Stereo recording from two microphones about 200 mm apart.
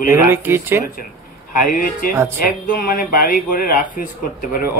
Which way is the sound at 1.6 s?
40° left (ahead or behind).